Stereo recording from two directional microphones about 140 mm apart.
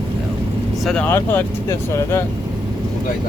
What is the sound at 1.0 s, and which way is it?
Speech, 15° left (ahead or behind).